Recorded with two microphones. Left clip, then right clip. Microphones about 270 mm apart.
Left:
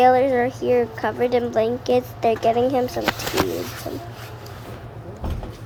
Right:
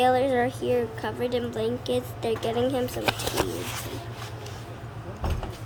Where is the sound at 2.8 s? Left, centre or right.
Centre.